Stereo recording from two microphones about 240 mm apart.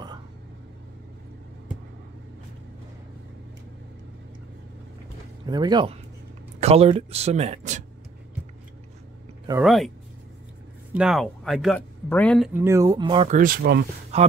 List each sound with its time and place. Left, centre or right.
5.5 s speech: centre
9.5 s speech: centre
10.9 s speech: centre
12.5 s speech: centre
13.4 s speech: right
14.1 s speech: right